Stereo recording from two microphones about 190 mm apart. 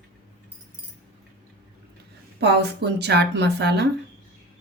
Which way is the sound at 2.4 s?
60° right (ahead or behind).